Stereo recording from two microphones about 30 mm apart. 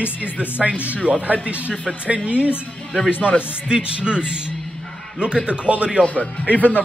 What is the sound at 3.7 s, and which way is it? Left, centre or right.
Speech, right.